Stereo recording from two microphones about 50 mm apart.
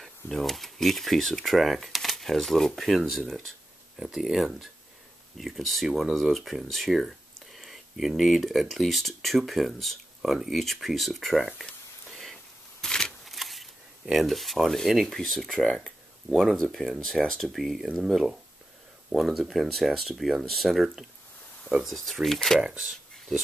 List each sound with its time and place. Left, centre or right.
0.0 s speech: centre
4.0 s speech: centre
12.1 s rain on surface: centre
12.8 s a sound: centre
13.2 s shuffling cards: centre
14.1 s speech: centre
16.3 s speech: centre
22.6 s speech: centre